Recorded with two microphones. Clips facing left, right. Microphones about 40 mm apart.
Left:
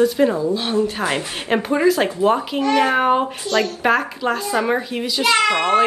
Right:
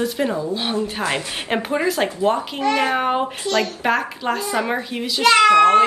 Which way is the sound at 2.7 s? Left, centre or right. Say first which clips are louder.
Left 2 dB; left.